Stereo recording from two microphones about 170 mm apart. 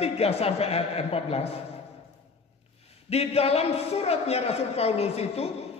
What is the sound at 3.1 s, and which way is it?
A man's voice, 35° left (ahead or behind).